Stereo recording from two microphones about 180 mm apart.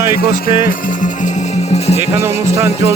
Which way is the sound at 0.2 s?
50° left (ahead or behind).